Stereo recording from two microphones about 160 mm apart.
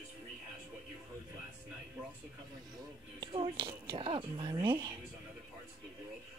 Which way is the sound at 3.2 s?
30° right (ahead or behind).